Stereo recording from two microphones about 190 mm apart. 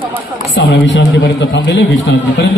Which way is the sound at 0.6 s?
70° left (ahead or behind).